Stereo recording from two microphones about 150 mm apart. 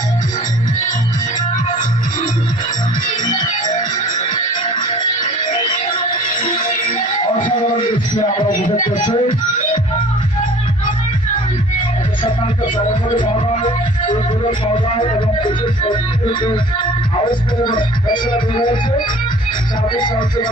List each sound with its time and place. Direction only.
3.2 s music: 30° left (ahead or behind)
4.9 s music: 30° left (ahead or behind)
7.8 s music: 30° left (ahead or behind)
13.6 s music: 55° left (ahead or behind)
15.4 s music: 30° left (ahead or behind)
17.6 s music: 30° left (ahead or behind)
19.9 s music: 30° left (ahead or behind)